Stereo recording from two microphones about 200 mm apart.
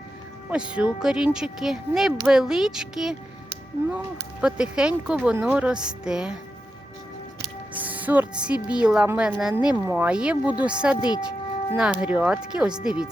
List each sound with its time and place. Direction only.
0.5 s speech: 5° right (ahead or behind)
7.8 s music: 10° right (ahead or behind)
8.5 s a woman's voice: 20° left (ahead or behind)
8.8 s speech: 5° right (ahead or behind)